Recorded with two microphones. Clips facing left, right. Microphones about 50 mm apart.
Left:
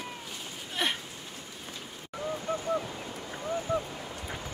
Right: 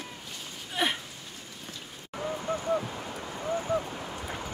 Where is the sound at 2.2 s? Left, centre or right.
Right.